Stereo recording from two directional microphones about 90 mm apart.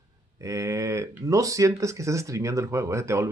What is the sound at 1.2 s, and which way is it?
Speech, 40° right (ahead or behind).